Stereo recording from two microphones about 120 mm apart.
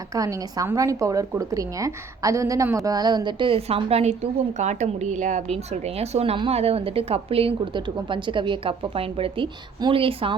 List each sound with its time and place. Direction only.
0.1 s a woman's voice: 30° right (ahead or behind); by 4.1 s 55° right (ahead or behind)
4.5 s a woman's voice: 75° right (ahead or behind); by 10.3 s 50° right (ahead or behind)